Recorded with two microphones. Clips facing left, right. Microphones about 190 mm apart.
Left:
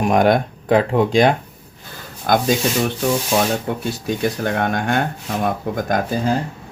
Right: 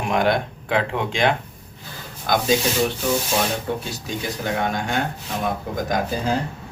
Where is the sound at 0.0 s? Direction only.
45° left (ahead or behind).